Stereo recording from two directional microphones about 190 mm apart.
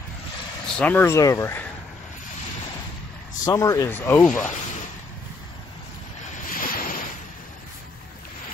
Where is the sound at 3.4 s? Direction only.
20° left (ahead or behind).